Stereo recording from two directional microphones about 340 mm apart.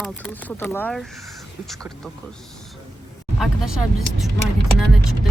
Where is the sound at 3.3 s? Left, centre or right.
Centre.